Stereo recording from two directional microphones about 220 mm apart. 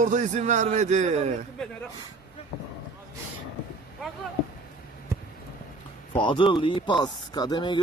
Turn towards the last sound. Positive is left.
turn(degrees=20)  # may be behind; listen again after turning